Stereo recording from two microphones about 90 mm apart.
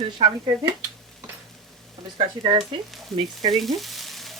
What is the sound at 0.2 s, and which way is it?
Speech, 60° right (ahead or behind).